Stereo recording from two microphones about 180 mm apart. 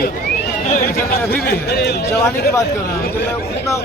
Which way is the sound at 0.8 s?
60° left (ahead or behind).